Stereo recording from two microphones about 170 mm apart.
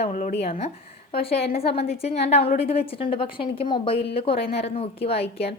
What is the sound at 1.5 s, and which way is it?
A woman's voice, 35° left (ahead or behind).